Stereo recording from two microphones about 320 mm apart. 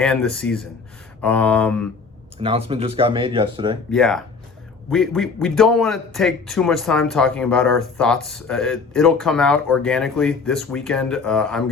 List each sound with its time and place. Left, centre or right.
0.0 s a man's voice: centre
2.4 s speech: centre
3.9 s a man's voice: centre